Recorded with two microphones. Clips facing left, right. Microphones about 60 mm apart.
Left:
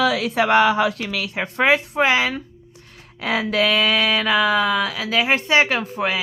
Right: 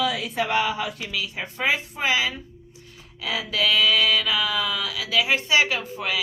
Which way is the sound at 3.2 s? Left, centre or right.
Left.